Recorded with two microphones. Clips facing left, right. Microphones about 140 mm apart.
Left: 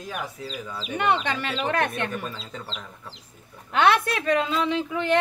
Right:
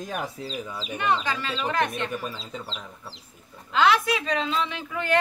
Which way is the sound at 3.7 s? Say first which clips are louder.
Left 1 dB; 60° left (ahead or behind).